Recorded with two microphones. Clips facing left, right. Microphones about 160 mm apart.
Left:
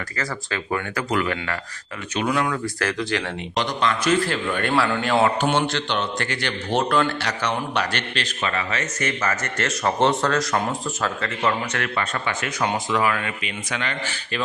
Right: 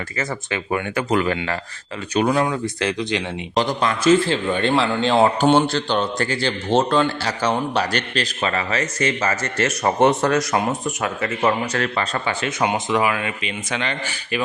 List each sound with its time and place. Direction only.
0.2 s a man's voice: 20° right (ahead or behind)
2.5 s a man's voice: 20° right (ahead or behind)
3.5 s a man's voice: 35° right (ahead or behind)
11.6 s a man's voice: 30° right (ahead or behind)
14.0 s a man's voice: 10° right (ahead or behind)